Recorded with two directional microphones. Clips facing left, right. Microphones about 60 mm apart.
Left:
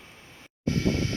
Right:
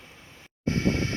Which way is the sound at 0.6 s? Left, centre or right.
Right.